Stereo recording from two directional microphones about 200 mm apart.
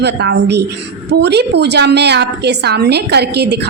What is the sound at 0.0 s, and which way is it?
A woman's voice, 60° right (ahead or behind).